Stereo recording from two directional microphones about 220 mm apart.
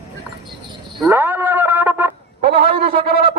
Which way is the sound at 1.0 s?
10° right (ahead or behind).